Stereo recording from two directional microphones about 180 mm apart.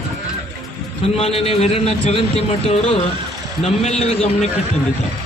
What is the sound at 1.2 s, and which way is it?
A man's voice, 30° left (ahead or behind).